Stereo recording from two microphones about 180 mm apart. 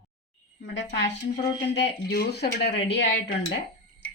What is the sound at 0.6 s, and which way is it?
Speech, 85° left.